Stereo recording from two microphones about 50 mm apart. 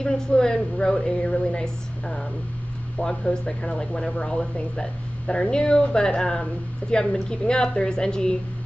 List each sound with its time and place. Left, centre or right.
0.3 s speech: centre